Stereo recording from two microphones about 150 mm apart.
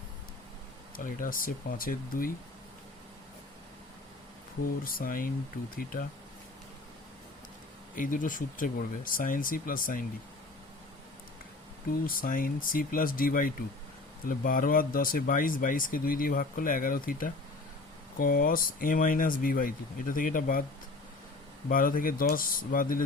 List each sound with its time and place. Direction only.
0.9 s speech: 65° left (ahead or behind)
4.8 s speech: 70° left (ahead or behind)
7.9 s speech: 65° left (ahead or behind)
12.0 s speech: 70° left (ahead or behind)
21.7 s speech: 70° left (ahead or behind)